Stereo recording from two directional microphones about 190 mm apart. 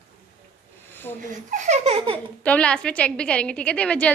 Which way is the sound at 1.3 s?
40° right (ahead or behind).